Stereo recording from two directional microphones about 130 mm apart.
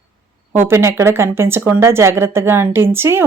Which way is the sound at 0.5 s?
20° right (ahead or behind).